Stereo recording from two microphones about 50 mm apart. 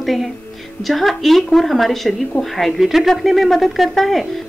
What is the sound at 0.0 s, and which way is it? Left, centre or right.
A woman's voice, centre.